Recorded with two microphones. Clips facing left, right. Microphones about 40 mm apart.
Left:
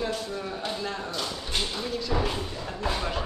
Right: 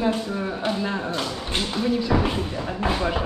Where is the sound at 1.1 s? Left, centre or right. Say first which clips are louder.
Right 5 dB; right.